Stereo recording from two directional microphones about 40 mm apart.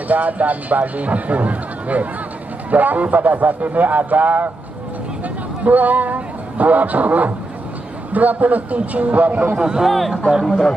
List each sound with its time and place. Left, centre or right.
0.1 s speech: right
5.6 s speech: right
9.6 s speech: centre
9.8 s speech: centre